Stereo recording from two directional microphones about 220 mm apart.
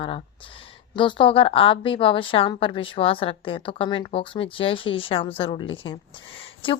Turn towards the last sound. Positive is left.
turn(degrees=25)  # may be behind; listen again after turning